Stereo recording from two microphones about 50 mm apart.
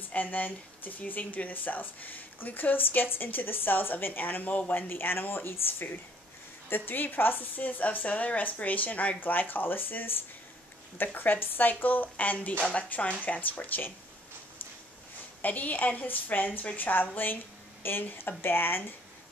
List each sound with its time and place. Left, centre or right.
0.1 s speech: left
4.7 s speech: left
15.4 s speech: left